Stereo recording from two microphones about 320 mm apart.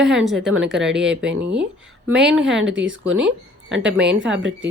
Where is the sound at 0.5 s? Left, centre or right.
Right.